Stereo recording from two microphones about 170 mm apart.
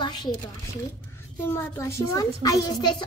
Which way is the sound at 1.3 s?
15° left (ahead or behind).